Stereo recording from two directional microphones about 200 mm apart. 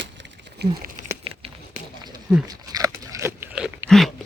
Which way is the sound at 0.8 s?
40° right (ahead or behind).